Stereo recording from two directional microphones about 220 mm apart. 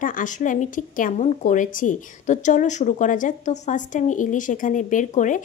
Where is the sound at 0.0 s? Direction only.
35° left (ahead or behind).